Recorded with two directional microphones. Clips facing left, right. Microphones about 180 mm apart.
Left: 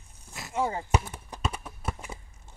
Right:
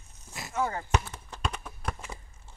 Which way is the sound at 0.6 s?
15° left (ahead or behind).